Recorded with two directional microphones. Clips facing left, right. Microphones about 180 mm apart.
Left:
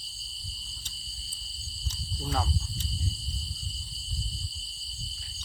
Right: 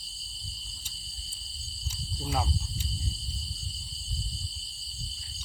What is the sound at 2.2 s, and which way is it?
Speech, 10° right (ahead or behind).